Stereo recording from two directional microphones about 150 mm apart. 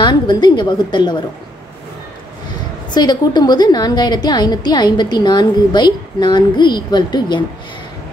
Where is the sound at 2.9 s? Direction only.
30° left (ahead or behind).